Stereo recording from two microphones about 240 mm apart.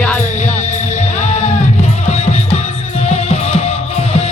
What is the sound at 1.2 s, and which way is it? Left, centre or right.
Music, left.